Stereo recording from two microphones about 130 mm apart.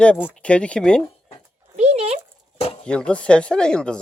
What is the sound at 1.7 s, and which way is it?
Speech, 55° right (ahead or behind).